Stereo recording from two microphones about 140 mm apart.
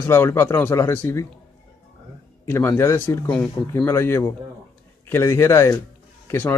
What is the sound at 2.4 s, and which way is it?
A man's voice, 15° left (ahead or behind).